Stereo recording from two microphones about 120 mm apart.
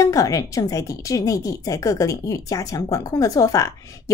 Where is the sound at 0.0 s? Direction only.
30° left (ahead or behind).